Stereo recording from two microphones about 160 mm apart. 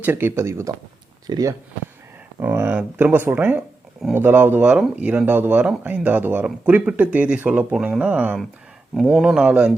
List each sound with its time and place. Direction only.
0.0 s speech: 15° right (ahead or behind)